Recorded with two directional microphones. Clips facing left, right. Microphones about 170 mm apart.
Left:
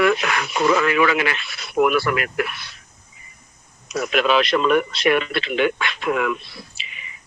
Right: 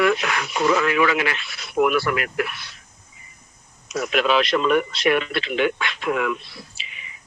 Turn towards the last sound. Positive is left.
turn(degrees=65)  # may be behind; listen again after turning